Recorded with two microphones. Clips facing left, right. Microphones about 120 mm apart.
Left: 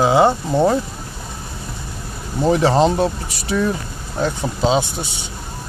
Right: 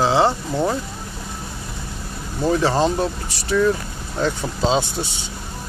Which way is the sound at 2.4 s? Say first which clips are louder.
Left 3 dB; 20° left (ahead or behind).